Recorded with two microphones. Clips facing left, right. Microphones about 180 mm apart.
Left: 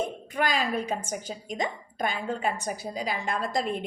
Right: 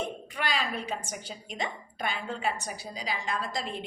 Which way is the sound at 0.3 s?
45° left (ahead or behind).